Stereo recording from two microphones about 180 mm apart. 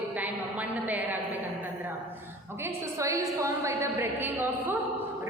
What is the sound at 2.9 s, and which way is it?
A woman's voice, 15° right (ahead or behind).